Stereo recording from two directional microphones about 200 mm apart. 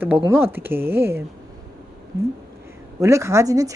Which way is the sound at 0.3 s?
10° right (ahead or behind).